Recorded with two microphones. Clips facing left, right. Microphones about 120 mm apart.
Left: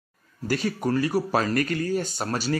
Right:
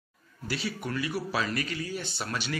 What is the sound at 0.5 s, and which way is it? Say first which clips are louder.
A man's voice: left 8 dB; 45° left (ahead or behind).